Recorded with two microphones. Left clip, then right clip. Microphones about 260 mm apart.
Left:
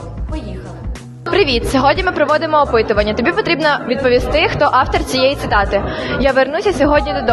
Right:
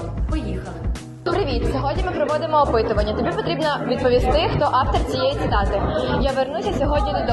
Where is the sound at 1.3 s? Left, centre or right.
Left.